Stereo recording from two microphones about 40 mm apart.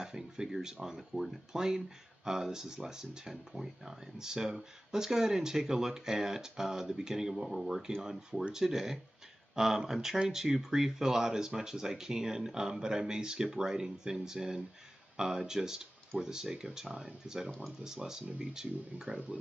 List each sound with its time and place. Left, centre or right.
0.0 s speech: centre
19.1 s speech: right